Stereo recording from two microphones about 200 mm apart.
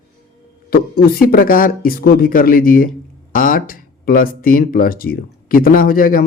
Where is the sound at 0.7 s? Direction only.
50° left (ahead or behind).